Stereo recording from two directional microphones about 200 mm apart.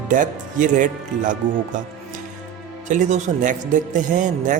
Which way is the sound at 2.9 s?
40° right (ahead or behind).